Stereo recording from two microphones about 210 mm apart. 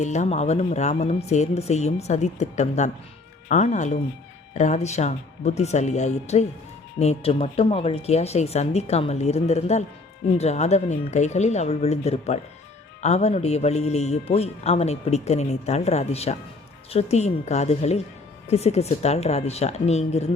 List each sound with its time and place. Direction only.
0.0 s a man's voice: 35° left (ahead or behind)